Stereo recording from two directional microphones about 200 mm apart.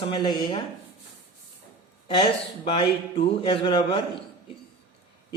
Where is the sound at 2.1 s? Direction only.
25° left (ahead or behind).